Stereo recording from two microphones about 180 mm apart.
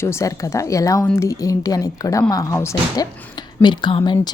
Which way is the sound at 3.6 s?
25° left (ahead or behind).